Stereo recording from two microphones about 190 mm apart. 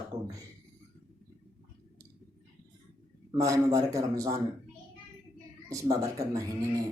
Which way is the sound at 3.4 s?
20° right (ahead or behind).